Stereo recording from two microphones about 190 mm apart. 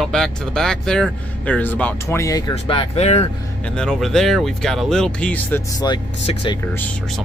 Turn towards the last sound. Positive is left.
turn(degrees=25)  # may be behind; listen again after turning